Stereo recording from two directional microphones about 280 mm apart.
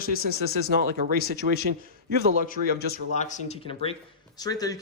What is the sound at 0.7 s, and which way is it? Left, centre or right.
Speech, right.